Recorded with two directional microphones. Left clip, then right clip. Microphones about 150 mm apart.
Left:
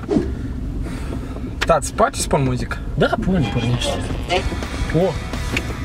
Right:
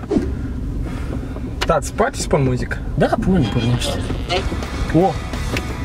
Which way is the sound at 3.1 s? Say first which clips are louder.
Right 2 dB; centre (ahead or behind).